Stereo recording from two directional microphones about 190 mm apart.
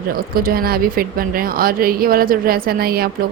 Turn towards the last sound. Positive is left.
turn(degrees=-55)  # may be behind; listen again after turning